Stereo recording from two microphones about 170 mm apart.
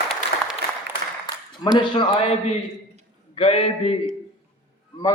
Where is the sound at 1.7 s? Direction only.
30° left (ahead or behind).